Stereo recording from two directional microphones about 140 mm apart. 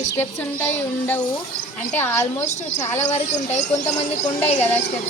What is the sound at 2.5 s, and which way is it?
Speech, 55° left (ahead or behind).